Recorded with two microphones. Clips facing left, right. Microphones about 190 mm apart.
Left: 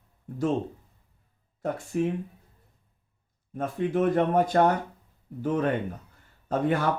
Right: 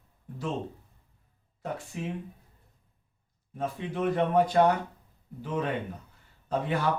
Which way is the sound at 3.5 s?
50° left (ahead or behind).